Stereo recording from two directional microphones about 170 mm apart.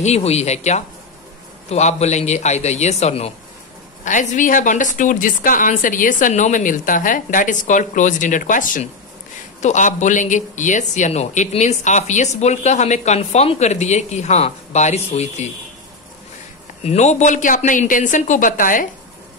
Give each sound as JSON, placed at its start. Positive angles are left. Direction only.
{"t": 0.0, "sound": "a man's voice", "side_deg": 40}
{"t": 16.8, "sound": "speech", "side_deg": 40}